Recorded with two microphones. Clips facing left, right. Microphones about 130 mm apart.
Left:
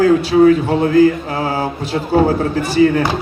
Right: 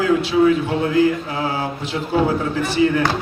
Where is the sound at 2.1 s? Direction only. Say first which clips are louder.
Left 5 dB; 40° left (ahead or behind).